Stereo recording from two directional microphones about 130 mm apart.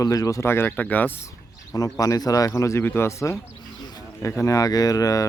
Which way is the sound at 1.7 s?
25° left (ahead or behind).